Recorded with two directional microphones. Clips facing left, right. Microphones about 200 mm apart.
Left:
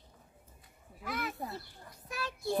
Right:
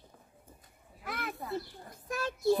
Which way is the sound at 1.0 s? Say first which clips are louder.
Left 1 dB; 55° right (ahead or behind).